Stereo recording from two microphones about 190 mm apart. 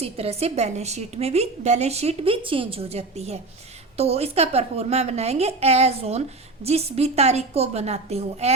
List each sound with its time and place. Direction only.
0.0 s a woman's voice: 30° right (ahead or behind)